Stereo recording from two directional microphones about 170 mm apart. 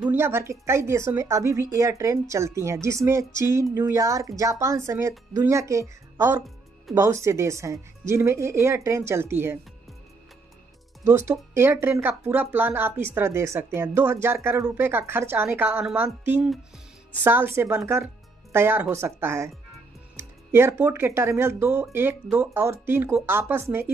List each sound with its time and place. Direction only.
0.0 s speech: 15° right (ahead or behind)
11.1 s speech: 15° right (ahead or behind)